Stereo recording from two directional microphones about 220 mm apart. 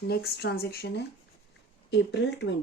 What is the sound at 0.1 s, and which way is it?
Speech, 45° left (ahead or behind).